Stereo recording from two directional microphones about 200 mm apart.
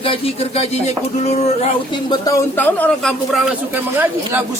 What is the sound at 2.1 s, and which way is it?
Speech, 15° left (ahead or behind).